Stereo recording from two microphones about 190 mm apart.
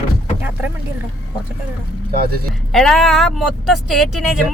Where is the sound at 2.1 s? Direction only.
55° right (ahead or behind).